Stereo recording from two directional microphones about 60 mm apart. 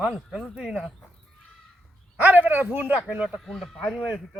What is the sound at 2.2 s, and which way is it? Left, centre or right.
Speech, right.